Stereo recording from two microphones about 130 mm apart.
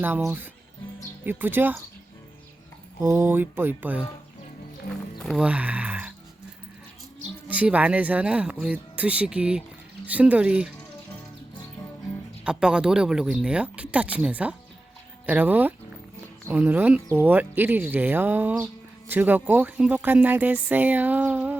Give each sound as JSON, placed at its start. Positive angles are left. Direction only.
{"t": 1.2, "sound": "speech", "side_deg": -15}
{"t": 3.0, "sound": "speech", "side_deg": -20}
{"t": 5.2, "sound": "speech", "side_deg": 0}
{"t": 5.5, "sound": "a sound", "side_deg": -10}
{"t": 7.4, "sound": "speech", "side_deg": -10}
{"t": 12.5, "sound": "speech", "side_deg": -5}